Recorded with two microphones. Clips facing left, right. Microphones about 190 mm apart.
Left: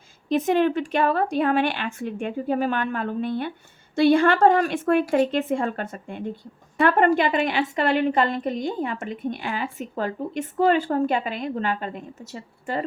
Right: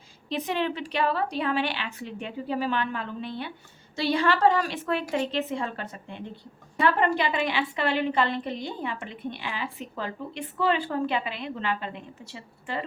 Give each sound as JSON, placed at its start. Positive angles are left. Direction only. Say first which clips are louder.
{"t": 0.3, "sound": "a woman's voice", "louder": "left 8 dB", "side_deg": 45}